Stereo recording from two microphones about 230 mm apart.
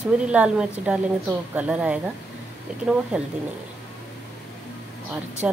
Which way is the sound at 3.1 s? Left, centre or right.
Centre.